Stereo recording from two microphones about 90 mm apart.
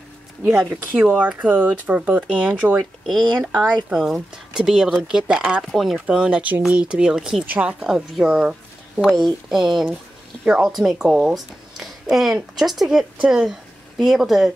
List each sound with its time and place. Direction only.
0.4 s speech: 15° right (ahead or behind)
3.1 s a woman's voice: centre (ahead or behind)